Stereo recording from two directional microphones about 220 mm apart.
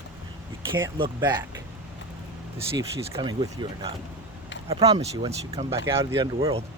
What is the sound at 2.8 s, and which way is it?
Speech, 15° right (ahead or behind).